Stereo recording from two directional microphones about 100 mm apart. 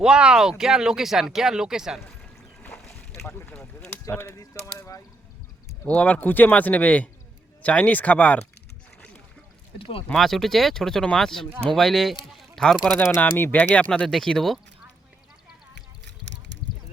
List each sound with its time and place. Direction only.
0.0 s speech: 10° right (ahead or behind)
2.6 s boat: 5° left (ahead or behind)
3.5 s a sound: 10° left (ahead or behind)
4.1 s speech: 25° left (ahead or behind)
5.8 s speech: 15° left (ahead or behind)
9.7 s speech: 65° left (ahead or behind)
10.1 s speech: centre (ahead or behind)
13.1 s speech: 20° left (ahead or behind); by 14.6 s 5° left (ahead or behind)